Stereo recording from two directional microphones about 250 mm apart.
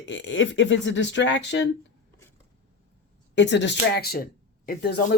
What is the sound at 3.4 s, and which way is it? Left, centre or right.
Speech, left.